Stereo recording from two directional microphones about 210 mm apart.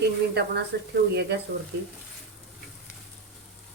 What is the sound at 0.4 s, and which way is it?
Speech, 50° right (ahead or behind).